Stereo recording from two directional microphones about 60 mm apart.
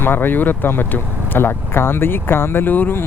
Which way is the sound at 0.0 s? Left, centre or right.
Left.